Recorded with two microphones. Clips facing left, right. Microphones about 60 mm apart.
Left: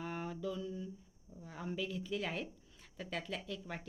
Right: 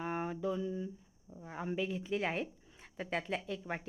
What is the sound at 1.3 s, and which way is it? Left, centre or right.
A woman's voice, right.